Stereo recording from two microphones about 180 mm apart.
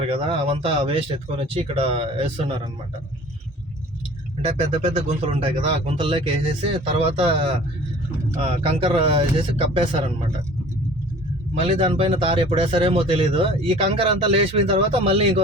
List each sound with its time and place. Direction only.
0.0 s speech: 30° right (ahead or behind)
4.4 s speech: 35° right (ahead or behind)
11.6 s speech: 30° right (ahead or behind)